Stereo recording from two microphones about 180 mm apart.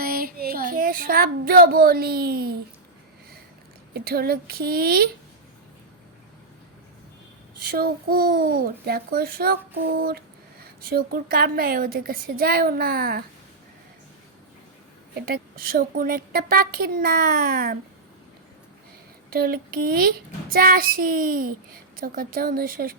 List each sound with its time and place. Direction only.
0.0 s child singing: 55° right (ahead or behind)
3.9 s a child's voice: 60° right (ahead or behind)
7.6 s a child's voice: 60° right (ahead or behind)
15.1 s a woman's voice: 55° right (ahead or behind)
19.3 s a child's voice: 55° right (ahead or behind)